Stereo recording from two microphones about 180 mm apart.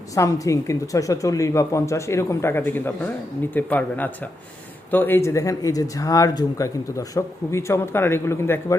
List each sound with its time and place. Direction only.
0.1 s speech: 20° left (ahead or behind)